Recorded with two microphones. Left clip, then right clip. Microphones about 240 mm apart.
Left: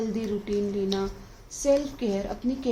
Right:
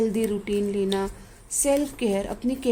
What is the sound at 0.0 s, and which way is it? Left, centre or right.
A woman's voice, right.